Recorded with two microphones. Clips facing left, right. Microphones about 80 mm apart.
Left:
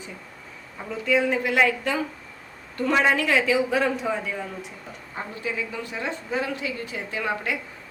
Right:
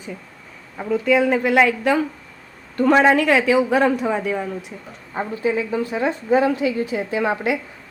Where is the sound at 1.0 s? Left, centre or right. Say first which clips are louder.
Right 4 dB; right.